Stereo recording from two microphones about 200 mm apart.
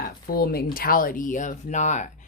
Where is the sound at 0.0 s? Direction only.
45° left (ahead or behind).